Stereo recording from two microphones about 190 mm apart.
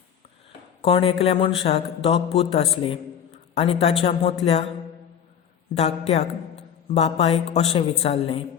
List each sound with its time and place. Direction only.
0.8 s speech: 30° left (ahead or behind)
5.7 s a man's voice: 35° left (ahead or behind)